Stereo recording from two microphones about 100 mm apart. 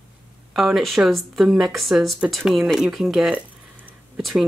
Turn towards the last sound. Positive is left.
turn(degrees=-5)  # may be behind; listen again after turning